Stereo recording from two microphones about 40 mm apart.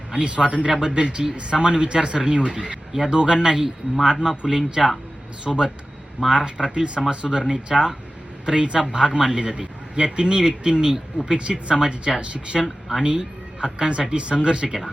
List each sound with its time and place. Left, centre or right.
0.2 s a man's voice: right
2.9 s a man's voice: centre
12.6 s speech: centre
13.1 s a sound: right
13.7 s a man's voice: right